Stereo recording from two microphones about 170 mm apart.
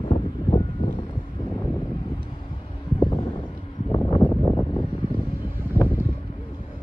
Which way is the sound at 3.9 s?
25° left (ahead or behind).